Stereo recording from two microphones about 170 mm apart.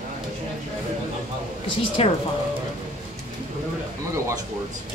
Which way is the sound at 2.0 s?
35° left (ahead or behind).